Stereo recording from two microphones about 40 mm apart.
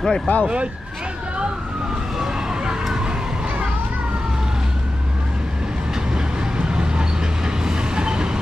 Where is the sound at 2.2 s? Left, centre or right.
Centre.